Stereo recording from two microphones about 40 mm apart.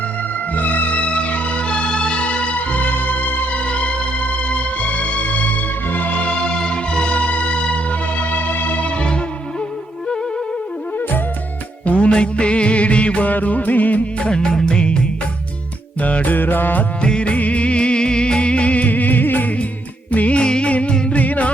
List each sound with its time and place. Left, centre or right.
0.5 s music: left
0.9 s music: left
3.5 s music: left
11.9 s music: left
14.2 s music: left
16.0 s music: left
17.0 s music: left
20.1 s music: left
20.4 s music: left
21.2 s music: left